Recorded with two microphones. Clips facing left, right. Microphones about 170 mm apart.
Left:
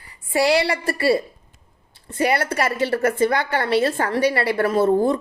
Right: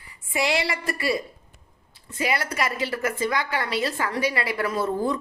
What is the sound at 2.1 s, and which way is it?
A woman's voice, 60° left (ahead or behind).